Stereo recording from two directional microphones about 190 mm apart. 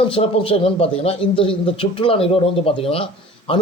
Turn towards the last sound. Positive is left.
turn(degrees=30)  # may be behind; listen again after turning